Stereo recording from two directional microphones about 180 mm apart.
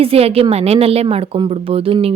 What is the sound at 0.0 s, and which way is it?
A woman's voice, 35° right (ahead or behind).